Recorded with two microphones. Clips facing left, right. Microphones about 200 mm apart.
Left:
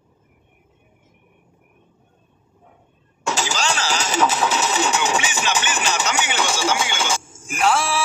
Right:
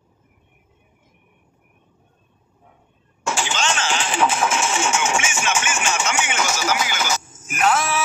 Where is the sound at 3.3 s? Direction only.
40° left (ahead or behind).